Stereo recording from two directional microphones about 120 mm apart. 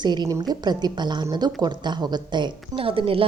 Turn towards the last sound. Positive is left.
turn(degrees=-50)  # may be behind; listen again after turning